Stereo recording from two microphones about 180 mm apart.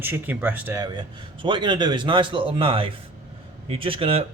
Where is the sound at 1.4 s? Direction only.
25° right (ahead or behind).